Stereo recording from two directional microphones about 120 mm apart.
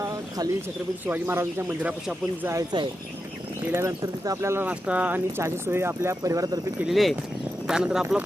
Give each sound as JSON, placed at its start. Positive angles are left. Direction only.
{"t": 0.0, "sound": "a sound", "side_deg": -30}
{"t": 1.0, "sound": "speech", "side_deg": -15}
{"t": 1.6, "sound": "speech", "side_deg": -5}
{"t": 2.7, "sound": "speech", "side_deg": -40}
{"t": 3.7, "sound": "speech", "side_deg": -20}
{"t": 6.7, "sound": "speech", "side_deg": 0}